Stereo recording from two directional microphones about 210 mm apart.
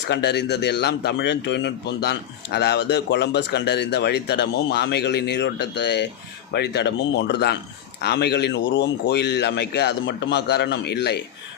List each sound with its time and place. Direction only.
0.1 s a man's voice: 55° left (ahead or behind)